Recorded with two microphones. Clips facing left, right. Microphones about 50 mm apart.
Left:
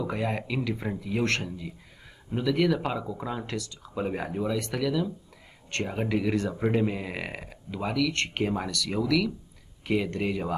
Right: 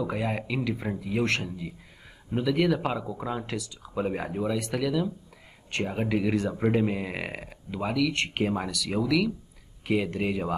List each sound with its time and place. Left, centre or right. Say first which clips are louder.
0.0 s speech: even; centre